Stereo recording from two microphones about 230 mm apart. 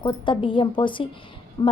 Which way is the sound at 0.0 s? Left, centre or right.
Left.